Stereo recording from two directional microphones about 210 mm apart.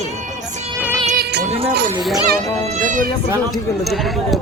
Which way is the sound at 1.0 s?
45° right (ahead or behind).